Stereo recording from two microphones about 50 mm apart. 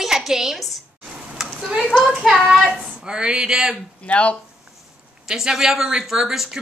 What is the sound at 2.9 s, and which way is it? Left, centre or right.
Speech, centre.